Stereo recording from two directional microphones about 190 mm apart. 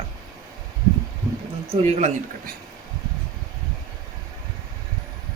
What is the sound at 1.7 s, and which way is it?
Speech, 35° right (ahead or behind).